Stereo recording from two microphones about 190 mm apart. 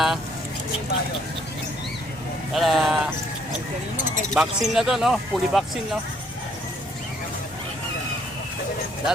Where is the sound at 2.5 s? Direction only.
Centre (ahead or behind).